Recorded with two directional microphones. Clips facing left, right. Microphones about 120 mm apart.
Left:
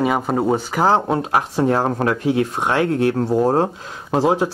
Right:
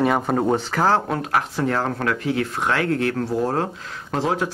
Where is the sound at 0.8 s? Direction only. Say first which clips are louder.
Left 4 dB; 20° left (ahead or behind).